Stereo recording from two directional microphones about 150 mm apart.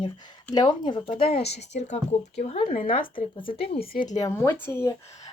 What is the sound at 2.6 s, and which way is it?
Speech, 65° left (ahead or behind).